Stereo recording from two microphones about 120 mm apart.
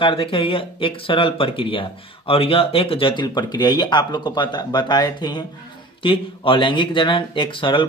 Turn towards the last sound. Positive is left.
turn(degrees=45)  # may be behind; listen again after turning